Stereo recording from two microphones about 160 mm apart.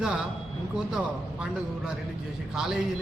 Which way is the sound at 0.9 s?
5° right (ahead or behind).